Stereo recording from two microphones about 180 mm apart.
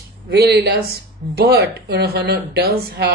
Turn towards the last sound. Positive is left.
turn(degrees=-60)  # may be behind; listen again after turning